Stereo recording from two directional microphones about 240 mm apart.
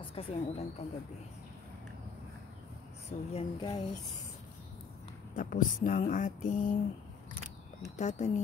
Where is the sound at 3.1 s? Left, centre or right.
Left.